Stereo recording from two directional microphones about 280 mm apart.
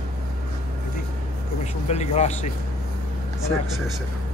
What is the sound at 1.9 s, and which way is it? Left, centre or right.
Speech, left.